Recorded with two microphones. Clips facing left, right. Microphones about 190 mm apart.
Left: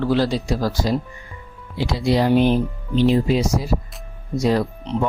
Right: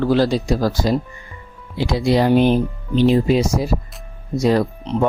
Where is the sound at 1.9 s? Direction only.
55° right (ahead or behind).